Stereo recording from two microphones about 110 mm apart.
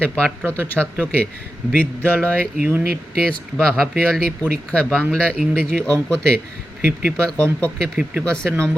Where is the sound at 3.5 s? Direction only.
5° left (ahead or behind).